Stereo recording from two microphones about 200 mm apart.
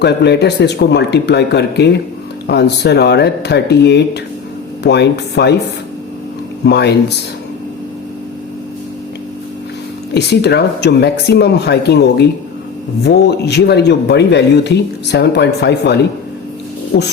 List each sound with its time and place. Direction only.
0.0 s speech: 55° left (ahead or behind)
6.7 s speech: 55° left (ahead or behind)
10.2 s speech: 55° left (ahead or behind)